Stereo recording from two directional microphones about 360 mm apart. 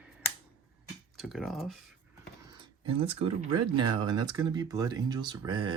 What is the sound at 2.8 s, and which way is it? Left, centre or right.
Speech, centre.